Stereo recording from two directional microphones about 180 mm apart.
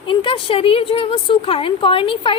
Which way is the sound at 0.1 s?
30° left (ahead or behind).